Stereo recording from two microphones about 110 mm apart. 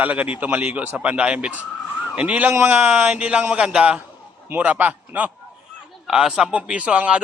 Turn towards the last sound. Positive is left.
turn(degrees=-10)  # may be behind; listen again after turning